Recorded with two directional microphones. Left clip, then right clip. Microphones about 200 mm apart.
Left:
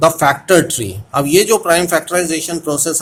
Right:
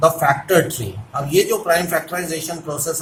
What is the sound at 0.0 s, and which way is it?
Speech, 55° left (ahead or behind).